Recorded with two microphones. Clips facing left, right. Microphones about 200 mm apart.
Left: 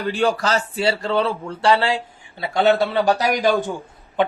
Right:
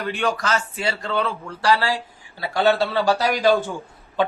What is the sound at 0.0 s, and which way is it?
A man's voice, 30° left (ahead or behind).